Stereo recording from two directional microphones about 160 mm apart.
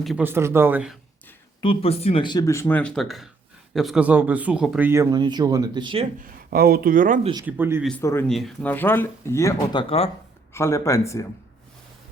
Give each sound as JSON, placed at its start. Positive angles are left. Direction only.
{"t": 0.2, "sound": "speech", "side_deg": -15}
{"t": 1.6, "sound": "speech", "side_deg": 35}
{"t": 4.9, "sound": "speech", "side_deg": -20}
{"t": 6.1, "sound": "speech", "side_deg": -70}
{"t": 7.4, "sound": "speech", "side_deg": -10}
{"t": 8.3, "sound": "speech", "side_deg": 0}